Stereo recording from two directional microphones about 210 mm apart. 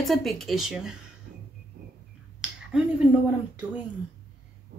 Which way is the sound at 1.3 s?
45° right (ahead or behind).